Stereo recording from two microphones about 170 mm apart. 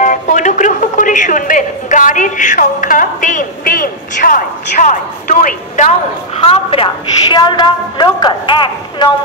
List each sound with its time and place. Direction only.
0.0 s music: 50° left (ahead or behind); by 9.1 s 25° left (ahead or behind)